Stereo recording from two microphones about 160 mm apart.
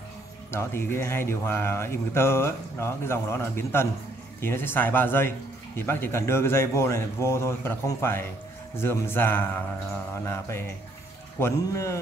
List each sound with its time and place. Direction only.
0.5 s speech: 15° left (ahead or behind)
11.3 s speech: 15° left (ahead or behind)